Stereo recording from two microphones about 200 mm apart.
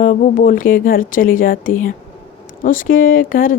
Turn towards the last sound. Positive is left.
turn(degrees=45)  # may be behind; listen again after turning